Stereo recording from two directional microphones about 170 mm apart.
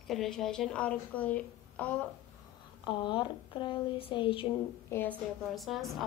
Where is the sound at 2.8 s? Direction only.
25° left (ahead or behind).